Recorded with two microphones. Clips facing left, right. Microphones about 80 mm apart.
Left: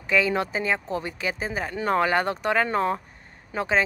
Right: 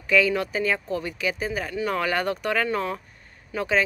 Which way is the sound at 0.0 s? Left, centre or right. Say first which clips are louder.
Right 1 dB; left.